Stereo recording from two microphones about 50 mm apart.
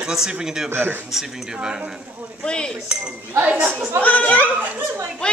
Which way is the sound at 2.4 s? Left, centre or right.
Centre.